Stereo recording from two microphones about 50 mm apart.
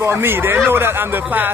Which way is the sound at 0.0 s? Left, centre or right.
Right.